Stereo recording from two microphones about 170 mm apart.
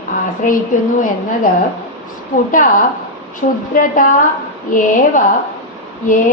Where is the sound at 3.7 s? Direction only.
55° left (ahead or behind).